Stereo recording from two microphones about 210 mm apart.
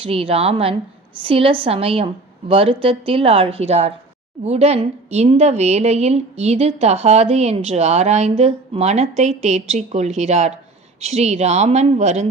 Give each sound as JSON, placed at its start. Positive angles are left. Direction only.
{"t": 0.0, "sound": "a woman's voice", "side_deg": -25}